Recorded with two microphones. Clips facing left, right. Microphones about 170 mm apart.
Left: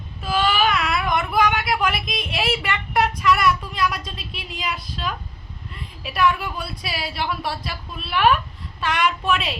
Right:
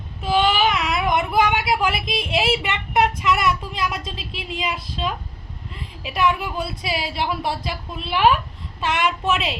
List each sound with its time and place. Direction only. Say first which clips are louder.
0.2 s a woman's voice: right 2 dB; 20° right (ahead or behind)